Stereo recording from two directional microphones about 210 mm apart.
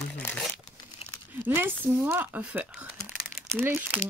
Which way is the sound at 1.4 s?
10° right (ahead or behind).